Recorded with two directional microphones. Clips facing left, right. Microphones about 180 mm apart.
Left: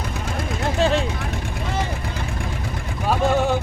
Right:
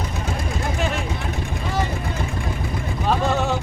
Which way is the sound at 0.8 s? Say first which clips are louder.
Left 8 dB; 30° left (ahead or behind).